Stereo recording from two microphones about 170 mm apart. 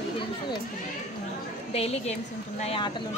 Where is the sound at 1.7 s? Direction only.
35° left (ahead or behind).